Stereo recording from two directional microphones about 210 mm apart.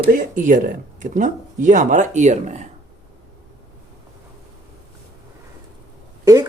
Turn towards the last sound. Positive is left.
turn(degrees=-15)  # may be behind; listen again after turning